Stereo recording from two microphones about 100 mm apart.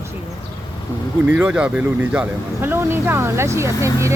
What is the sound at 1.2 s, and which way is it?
A woman's voice, 20° right (ahead or behind).